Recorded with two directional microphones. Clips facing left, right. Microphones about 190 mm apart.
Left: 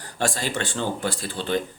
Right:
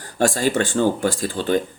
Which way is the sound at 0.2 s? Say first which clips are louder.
Right 7 dB; 45° right (ahead or behind).